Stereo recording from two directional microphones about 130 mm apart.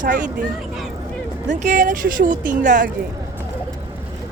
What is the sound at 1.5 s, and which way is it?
Speech, 65° right (ahead or behind).